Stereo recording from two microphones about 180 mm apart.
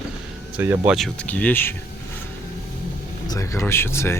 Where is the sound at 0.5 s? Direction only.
10° right (ahead or behind).